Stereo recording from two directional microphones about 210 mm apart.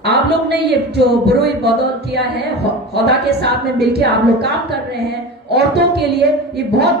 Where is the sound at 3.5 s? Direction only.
50° right (ahead or behind).